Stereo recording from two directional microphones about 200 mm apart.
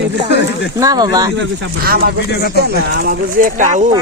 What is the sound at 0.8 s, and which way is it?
Speech, 20° right (ahead or behind).